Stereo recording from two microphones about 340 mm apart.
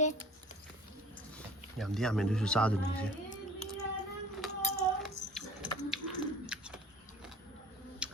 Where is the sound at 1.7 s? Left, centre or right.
Centre.